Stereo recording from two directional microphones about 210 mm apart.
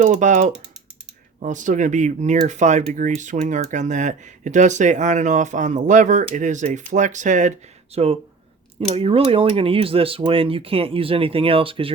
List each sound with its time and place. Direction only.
0.0 s speech: 35° right (ahead or behind)